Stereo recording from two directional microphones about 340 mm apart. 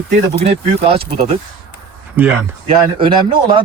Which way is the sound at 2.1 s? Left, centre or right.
Centre.